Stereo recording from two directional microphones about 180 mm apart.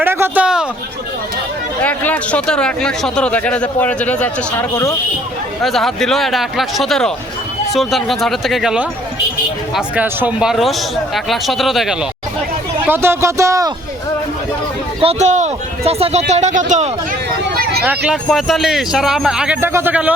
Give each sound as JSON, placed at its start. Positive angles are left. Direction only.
{"t": 0.0, "sound": "a sound", "side_deg": -10}
{"t": 1.8, "sound": "speech", "side_deg": 10}
{"t": 5.6, "sound": "speech", "side_deg": 0}
{"t": 12.9, "sound": "speech", "side_deg": -15}
{"t": 15.0, "sound": "a man's voice", "side_deg": -40}
{"t": 17.6, "sound": "a sound", "side_deg": -60}
{"t": 17.8, "sound": "speech", "side_deg": 0}